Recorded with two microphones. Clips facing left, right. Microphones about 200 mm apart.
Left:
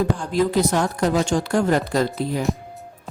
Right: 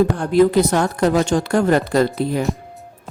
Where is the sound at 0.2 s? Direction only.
60° right (ahead or behind).